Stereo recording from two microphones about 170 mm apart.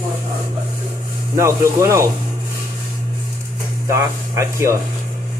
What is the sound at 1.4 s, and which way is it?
Speech, 15° right (ahead or behind).